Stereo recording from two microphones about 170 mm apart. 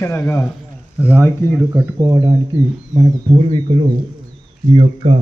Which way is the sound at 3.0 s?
30° right (ahead or behind).